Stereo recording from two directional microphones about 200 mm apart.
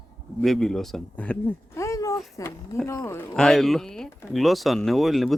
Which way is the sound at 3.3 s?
5° left (ahead or behind).